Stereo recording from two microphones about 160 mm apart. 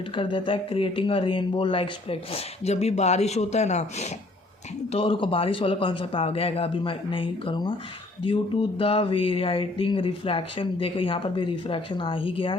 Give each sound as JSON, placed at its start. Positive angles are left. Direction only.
{"t": 0.1, "sound": "speech", "side_deg": 30}